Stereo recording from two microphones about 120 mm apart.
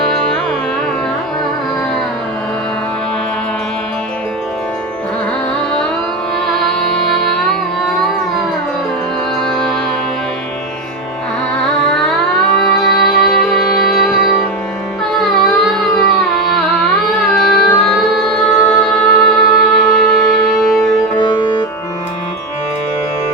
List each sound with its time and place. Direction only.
9.4 s music: 5° left (ahead or behind)
11.9 s music: 5° left (ahead or behind)
21.2 s music: 40° left (ahead or behind)